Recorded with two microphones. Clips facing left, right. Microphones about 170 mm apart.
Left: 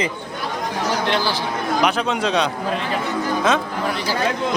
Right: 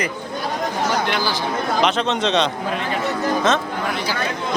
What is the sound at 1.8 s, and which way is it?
Speech, 10° left (ahead or behind).